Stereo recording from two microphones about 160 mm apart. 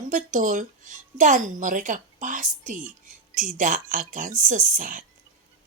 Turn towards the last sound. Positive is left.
turn(degrees=-55)  # may be behind; listen again after turning